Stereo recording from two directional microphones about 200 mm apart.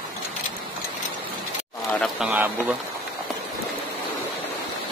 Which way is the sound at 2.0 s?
5° right (ahead or behind).